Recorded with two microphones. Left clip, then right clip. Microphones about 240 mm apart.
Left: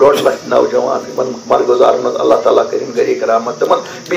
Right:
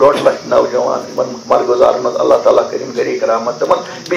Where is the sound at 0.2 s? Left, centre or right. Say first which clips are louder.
Even; left.